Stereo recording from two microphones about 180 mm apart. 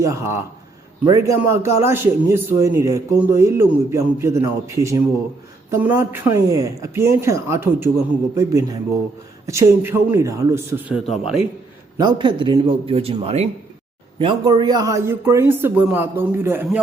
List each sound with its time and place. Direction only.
0.0 s a man's voice: 15° right (ahead or behind)
9.5 s a man's voice: 15° right (ahead or behind)
11.1 s a man's voice: centre (ahead or behind)
11.9 s a man's voice: 25° right (ahead or behind)